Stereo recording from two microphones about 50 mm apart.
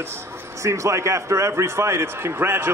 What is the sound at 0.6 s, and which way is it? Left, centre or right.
A man's voice, right.